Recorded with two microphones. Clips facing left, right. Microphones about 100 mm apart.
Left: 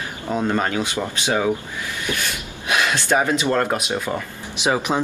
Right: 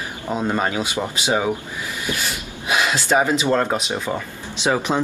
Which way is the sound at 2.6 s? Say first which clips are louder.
Even; 5° right (ahead or behind).